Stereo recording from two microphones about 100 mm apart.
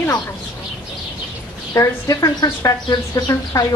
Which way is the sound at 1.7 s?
35° left (ahead or behind).